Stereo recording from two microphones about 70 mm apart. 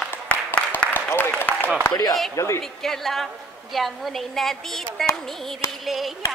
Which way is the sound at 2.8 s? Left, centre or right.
Centre.